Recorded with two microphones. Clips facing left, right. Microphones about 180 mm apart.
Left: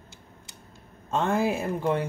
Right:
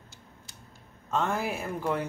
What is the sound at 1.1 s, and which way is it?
Speech, 20° left (ahead or behind).